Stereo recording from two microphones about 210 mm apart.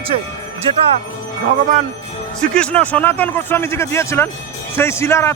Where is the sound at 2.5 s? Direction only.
5° left (ahead or behind).